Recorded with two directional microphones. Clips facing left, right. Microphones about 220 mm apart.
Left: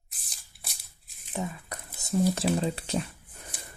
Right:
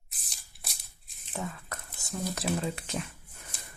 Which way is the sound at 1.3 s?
15° left (ahead or behind).